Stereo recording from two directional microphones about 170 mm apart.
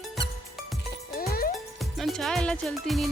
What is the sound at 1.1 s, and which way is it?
Music, 60° left (ahead or behind).